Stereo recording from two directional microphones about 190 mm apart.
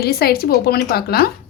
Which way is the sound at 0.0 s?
55° left (ahead or behind).